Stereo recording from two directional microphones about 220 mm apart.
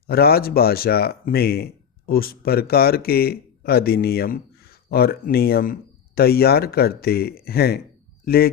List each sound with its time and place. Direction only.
0.1 s speech: 45° left (ahead or behind)